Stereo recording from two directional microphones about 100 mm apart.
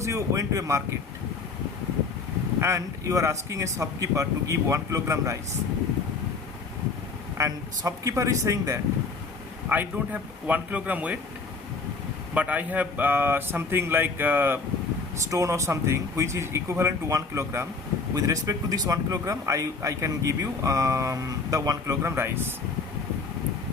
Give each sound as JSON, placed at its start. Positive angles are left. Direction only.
{"t": 0.0, "sound": "speech", "side_deg": -30}
{"t": 2.6, "sound": "speech", "side_deg": -30}
{"t": 7.3, "sound": "a man's voice", "side_deg": -35}
{"t": 9.6, "sound": "speech", "side_deg": -15}
{"t": 12.3, "sound": "speech", "side_deg": -15}
{"t": 15.2, "sound": "a man's voice", "side_deg": -30}
{"t": 22.1, "sound": "speech", "side_deg": -20}